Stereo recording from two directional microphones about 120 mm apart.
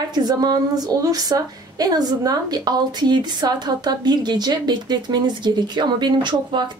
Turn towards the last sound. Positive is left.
turn(degrees=-40)  # may be behind; listen again after turning